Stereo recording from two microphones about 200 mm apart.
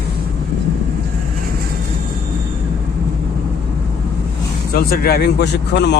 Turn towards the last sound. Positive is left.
turn(degrees=55)  # may be behind; listen again after turning